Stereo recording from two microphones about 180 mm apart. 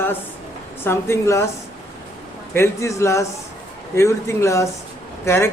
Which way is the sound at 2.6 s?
15° left (ahead or behind).